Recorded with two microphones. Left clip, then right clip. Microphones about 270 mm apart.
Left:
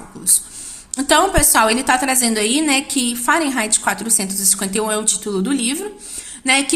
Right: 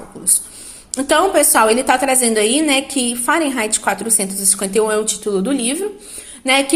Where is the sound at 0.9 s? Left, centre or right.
Left.